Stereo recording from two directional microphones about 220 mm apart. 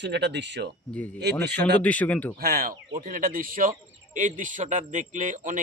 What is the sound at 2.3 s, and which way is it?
Speech, 40° right (ahead or behind).